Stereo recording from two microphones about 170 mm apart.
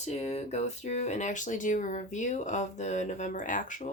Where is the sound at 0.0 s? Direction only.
40° left (ahead or behind).